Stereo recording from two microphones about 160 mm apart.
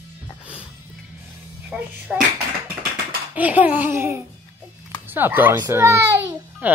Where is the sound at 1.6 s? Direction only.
10° right (ahead or behind).